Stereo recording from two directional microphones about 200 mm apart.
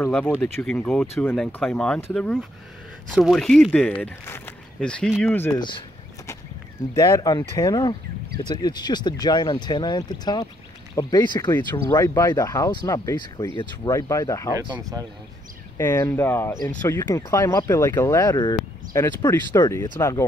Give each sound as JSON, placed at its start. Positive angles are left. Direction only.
{"t": 0.0, "sound": "speech", "side_deg": 5}
{"t": 5.6, "sound": "a sound", "side_deg": 25}
{"t": 6.9, "sound": "speech", "side_deg": 15}
{"t": 14.6, "sound": "speech", "side_deg": -20}
{"t": 15.8, "sound": "speech", "side_deg": 10}